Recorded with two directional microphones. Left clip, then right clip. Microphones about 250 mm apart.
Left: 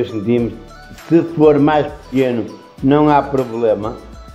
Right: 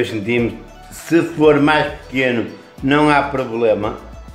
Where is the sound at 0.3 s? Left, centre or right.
Left.